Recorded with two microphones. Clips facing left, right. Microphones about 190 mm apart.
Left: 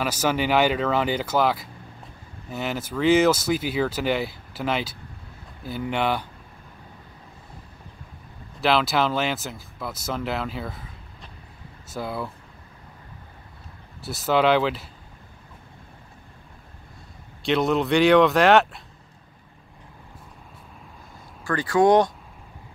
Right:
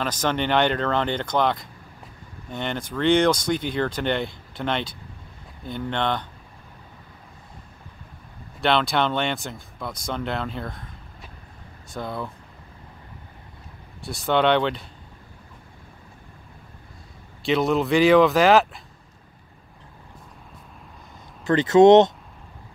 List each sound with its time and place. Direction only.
0.0 s speech: 10° left (ahead or behind)
8.5 s speech: 5° left (ahead or behind)
11.9 s speech: 5° left (ahead or behind)
14.0 s speech: centre (ahead or behind)
17.4 s speech: centre (ahead or behind)
21.5 s speech: 20° right (ahead or behind)